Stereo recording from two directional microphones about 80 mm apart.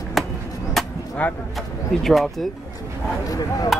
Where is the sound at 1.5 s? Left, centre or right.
Centre.